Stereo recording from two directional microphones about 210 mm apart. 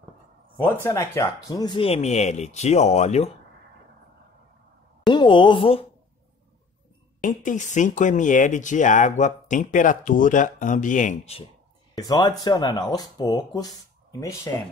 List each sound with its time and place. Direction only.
0.8 s speech: 15° left (ahead or behind); by 3.3 s 30° left (ahead or behind)
5.0 s speech: 20° left (ahead or behind)
7.2 s speech: 40° left (ahead or behind)
11.9 s speech: 20° left (ahead or behind)